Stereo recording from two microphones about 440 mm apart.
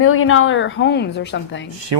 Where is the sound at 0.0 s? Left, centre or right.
Left.